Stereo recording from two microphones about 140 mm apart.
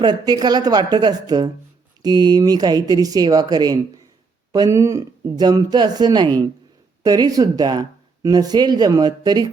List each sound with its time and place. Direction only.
0.0 s speech: 30° right (ahead or behind)